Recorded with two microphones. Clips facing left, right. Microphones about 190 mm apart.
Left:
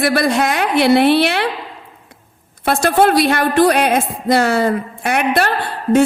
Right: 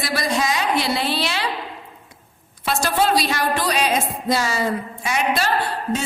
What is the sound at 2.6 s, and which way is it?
Speech, 55° left (ahead or behind).